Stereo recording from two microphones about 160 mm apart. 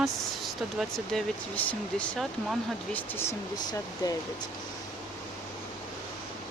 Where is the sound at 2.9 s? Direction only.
15° left (ahead or behind).